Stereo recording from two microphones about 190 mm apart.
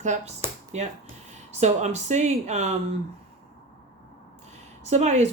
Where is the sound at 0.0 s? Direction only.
35° right (ahead or behind).